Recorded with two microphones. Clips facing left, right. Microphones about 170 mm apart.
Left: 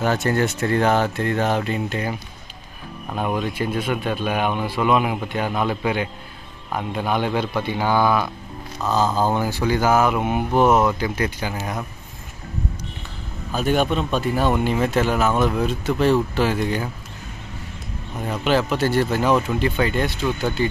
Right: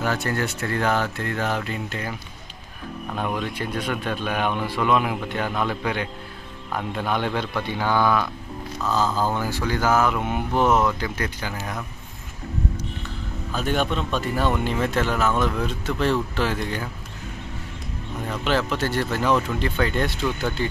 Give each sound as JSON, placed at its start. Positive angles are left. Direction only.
{"t": 0.0, "sound": "speech", "side_deg": 25}
{"t": 3.2, "sound": "a man's voice", "side_deg": 10}
{"t": 13.5, "sound": "a man's voice", "side_deg": 10}
{"t": 18.3, "sound": "a man's voice", "side_deg": 15}